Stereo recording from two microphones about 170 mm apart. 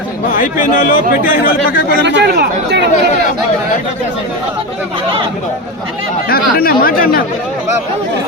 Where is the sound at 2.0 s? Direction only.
70° right (ahead or behind).